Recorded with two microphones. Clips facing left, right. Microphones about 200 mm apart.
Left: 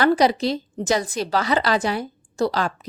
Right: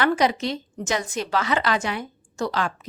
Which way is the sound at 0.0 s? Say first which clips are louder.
Left 4 dB; 35° left (ahead or behind).